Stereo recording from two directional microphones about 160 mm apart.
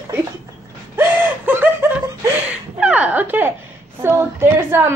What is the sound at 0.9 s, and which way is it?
Snicker, 15° right (ahead or behind).